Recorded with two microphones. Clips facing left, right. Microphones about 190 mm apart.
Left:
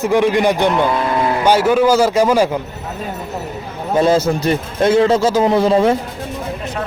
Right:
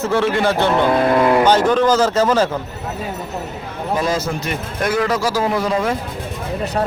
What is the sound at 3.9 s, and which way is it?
A man's voice, 30° left (ahead or behind).